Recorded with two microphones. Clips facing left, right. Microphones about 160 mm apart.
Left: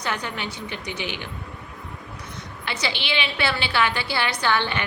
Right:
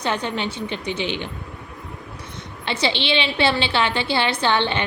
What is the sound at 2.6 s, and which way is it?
A woman's voice, 25° right (ahead or behind).